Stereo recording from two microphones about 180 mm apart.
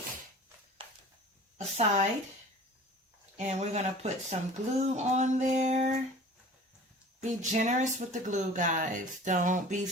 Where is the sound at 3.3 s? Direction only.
40° right (ahead or behind).